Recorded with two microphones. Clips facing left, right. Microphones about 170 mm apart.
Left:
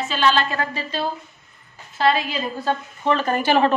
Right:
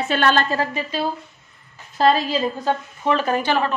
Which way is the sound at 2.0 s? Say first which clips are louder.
Right 3 dB; 40° right (ahead or behind).